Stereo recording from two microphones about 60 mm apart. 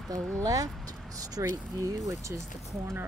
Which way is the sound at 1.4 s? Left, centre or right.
Right.